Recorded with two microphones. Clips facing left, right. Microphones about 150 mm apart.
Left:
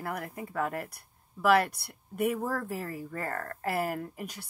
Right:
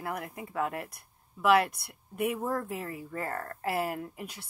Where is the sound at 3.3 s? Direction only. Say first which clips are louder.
Even; 30° right (ahead or behind).